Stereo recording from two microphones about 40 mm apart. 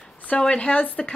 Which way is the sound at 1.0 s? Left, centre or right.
Centre.